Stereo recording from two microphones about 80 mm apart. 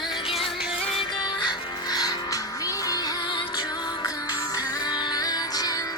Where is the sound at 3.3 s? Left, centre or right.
Left.